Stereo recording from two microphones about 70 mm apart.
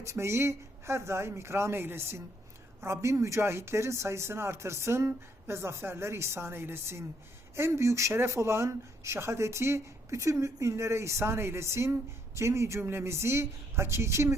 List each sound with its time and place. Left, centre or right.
0.0 s speech: right